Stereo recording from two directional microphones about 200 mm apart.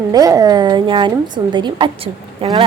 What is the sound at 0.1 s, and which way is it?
A woman's voice, 15° right (ahead or behind).